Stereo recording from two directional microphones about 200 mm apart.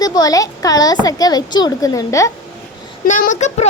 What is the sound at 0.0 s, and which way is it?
Speech, 20° left (ahead or behind).